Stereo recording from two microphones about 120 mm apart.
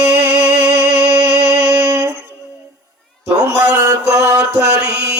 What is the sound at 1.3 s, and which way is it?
Music, 25° right (ahead or behind).